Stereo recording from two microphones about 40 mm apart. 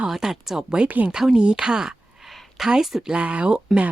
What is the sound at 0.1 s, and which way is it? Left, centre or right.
Speech, centre.